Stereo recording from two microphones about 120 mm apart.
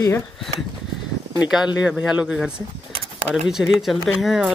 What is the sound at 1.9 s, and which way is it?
Speech, 5° right (ahead or behind).